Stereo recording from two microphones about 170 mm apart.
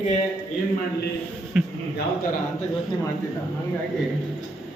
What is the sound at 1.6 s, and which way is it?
Speech, 5° right (ahead or behind).